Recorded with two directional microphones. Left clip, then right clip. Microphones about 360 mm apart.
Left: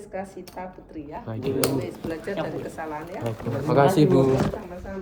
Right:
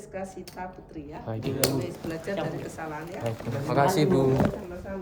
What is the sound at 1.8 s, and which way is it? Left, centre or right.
Speech, centre.